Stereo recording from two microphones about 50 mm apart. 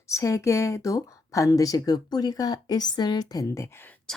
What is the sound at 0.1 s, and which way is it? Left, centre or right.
A woman's voice, left.